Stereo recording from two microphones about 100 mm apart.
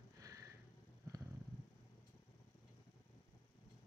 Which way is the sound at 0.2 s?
35° right (ahead or behind).